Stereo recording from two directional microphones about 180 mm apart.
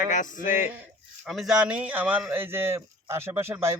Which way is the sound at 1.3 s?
Centre (ahead or behind).